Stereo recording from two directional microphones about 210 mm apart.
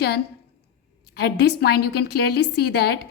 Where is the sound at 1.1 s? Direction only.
50° left (ahead or behind).